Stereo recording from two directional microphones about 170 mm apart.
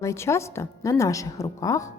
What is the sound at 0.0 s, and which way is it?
A woman's voice, 15° left (ahead or behind).